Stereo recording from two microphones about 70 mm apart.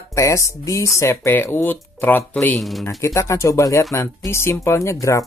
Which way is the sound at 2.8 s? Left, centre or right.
Left.